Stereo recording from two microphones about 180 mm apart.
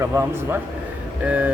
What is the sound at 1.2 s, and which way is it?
Speech, 5° right (ahead or behind).